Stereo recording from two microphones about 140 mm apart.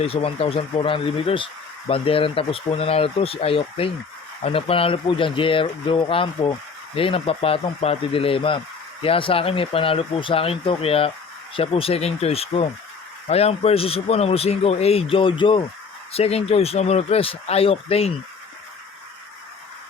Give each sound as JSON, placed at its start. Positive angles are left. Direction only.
{"t": 0.0, "sound": "speech", "side_deg": 45}